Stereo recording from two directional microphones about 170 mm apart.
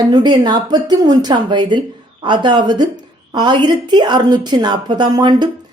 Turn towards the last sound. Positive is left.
turn(degrees=-25)  # may be behind; listen again after turning